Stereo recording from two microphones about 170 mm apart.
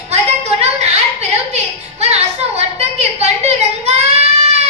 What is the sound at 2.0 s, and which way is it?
A woman's voice, 40° right (ahead or behind).